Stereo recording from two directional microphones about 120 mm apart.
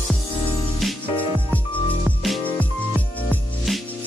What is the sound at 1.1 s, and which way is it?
Music, 15° left (ahead or behind).